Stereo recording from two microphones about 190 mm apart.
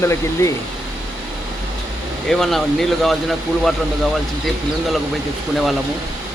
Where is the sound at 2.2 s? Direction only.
Centre (ahead or behind).